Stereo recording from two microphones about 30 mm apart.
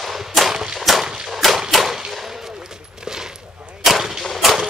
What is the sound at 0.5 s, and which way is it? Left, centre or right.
Gunshot, centre.